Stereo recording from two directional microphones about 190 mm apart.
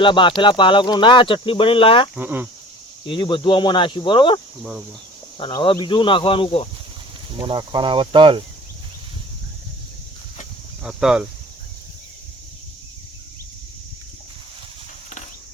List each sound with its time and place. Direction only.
0.0 s speech: 25° left (ahead or behind)
2.1 s speech: 10° right (ahead or behind)
3.1 s speech: 25° left (ahead or behind)
5.4 s speech: 25° left (ahead or behind)
7.3 s speech: 25° right (ahead or behind)
10.8 s speech: 5° right (ahead or behind)